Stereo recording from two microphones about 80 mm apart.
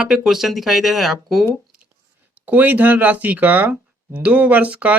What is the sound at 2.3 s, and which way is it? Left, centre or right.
Speech, right.